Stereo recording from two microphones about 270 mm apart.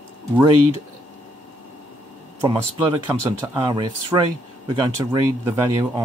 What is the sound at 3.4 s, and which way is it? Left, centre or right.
Speech, centre.